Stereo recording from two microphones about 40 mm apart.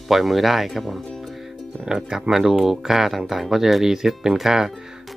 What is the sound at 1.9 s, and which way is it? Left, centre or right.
Speech, centre.